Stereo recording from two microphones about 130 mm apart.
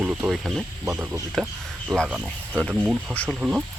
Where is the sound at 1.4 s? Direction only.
Centre (ahead or behind).